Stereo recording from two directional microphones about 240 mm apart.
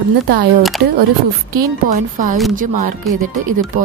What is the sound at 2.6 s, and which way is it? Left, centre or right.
Speech, right.